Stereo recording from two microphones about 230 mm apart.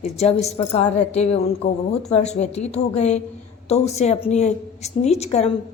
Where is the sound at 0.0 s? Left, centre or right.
Left.